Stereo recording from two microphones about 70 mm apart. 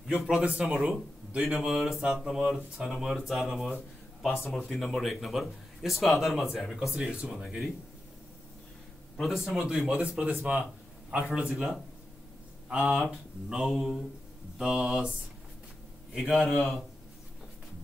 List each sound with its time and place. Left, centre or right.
0.3 s speech: centre
1.3 s speech: centre
7.1 s speech: centre
7.3 s speech: centre
9.1 s speech: centre
9.9 s speech: centre
10.4 s a sound: centre
11.2 s speech: centre